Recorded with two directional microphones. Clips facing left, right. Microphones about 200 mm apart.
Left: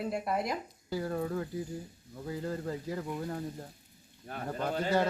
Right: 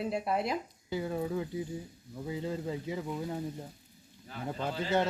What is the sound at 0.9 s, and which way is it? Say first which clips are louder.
Speech: even; 10° right (ahead or behind).